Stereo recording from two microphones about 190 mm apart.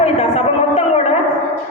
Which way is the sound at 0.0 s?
35° left (ahead or behind).